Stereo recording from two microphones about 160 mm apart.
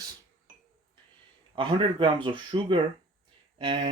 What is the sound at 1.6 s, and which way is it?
Speech, 30° right (ahead or behind).